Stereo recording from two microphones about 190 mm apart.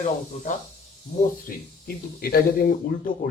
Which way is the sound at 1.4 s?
50° left (ahead or behind).